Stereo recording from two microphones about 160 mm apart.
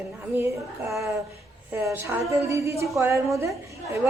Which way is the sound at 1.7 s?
15° right (ahead or behind).